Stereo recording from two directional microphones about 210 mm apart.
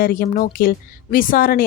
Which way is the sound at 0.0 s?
40° left (ahead or behind).